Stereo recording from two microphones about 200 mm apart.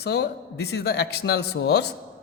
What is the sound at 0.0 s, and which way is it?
A man's voice, 55° left (ahead or behind).